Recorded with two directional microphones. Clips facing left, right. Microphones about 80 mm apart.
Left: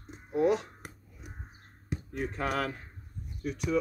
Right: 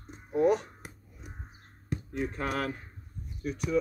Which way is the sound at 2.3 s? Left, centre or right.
Left.